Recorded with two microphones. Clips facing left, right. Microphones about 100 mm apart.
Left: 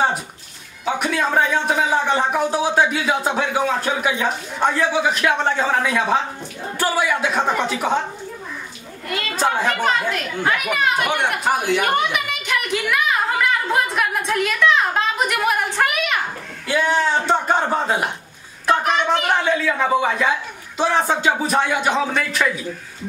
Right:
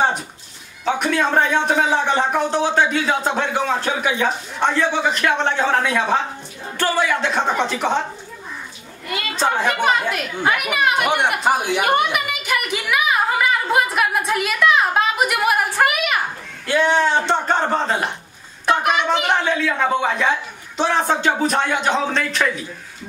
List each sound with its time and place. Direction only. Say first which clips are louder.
0.8 s a woman's voice: right 2 dB; 5° left (ahead or behind)
9.3 s a woman's voice: even; 5° left (ahead or behind); by 11.8 s 15° right (ahead or behind)
11.8 s a woman's voice: right 2 dB; 5° right (ahead or behind)
16.6 s speech: right 2 dB; 5° left (ahead or behind)
18.7 s a woman's voice: even; 5° right (ahead or behind)